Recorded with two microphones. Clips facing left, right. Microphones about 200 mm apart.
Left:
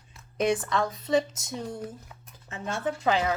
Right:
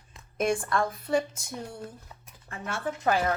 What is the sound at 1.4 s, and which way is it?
Speech, 20° left (ahead or behind).